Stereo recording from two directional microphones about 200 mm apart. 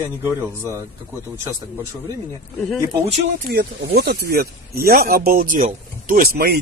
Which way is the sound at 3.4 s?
50° right (ahead or behind).